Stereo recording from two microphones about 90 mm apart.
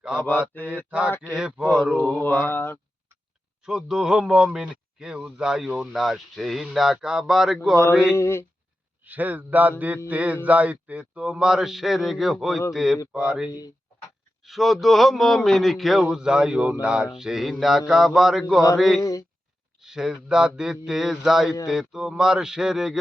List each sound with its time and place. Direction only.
0.9 s speech: 15° right (ahead or behind)
2.1 s mantra: 20° left (ahead or behind)
3.6 s speech: 10° right (ahead or behind)
8.1 s speech: 30° left (ahead or behind)
9.0 s a man's voice: 20° right (ahead or behind)